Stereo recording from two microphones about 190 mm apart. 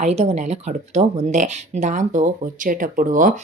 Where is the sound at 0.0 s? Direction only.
35° right (ahead or behind).